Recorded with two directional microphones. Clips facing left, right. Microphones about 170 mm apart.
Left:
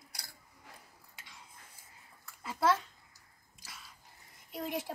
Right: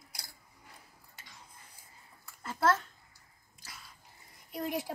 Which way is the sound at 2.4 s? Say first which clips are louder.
Right 1 dB; 5° left (ahead or behind).